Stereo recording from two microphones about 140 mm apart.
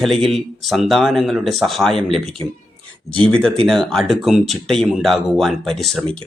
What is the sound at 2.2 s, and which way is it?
Speech, 40° right (ahead or behind).